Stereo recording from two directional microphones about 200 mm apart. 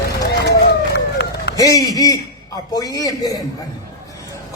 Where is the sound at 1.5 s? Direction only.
15° left (ahead or behind).